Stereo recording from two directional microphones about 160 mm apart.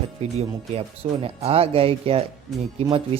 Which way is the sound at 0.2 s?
45° right (ahead or behind).